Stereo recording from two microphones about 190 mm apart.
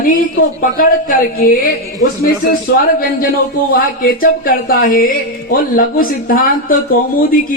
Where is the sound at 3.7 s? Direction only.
50° left (ahead or behind).